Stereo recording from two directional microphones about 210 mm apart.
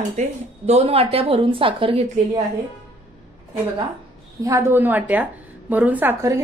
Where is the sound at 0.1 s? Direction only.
35° right (ahead or behind).